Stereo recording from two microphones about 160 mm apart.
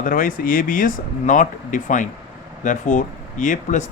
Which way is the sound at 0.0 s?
60° left (ahead or behind).